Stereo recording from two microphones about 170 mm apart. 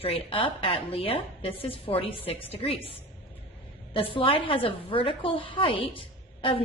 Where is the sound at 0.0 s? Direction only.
35° left (ahead or behind).